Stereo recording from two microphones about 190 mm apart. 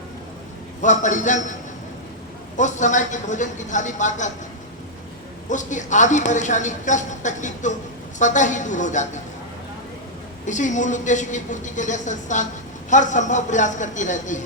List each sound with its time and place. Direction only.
0.8 s a woman's voice: 40° left (ahead or behind)
2.6 s a woman's voice: 40° left (ahead or behind)
5.5 s a woman's voice: 40° left (ahead or behind)
10.4 s a woman's voice: 40° left (ahead or behind)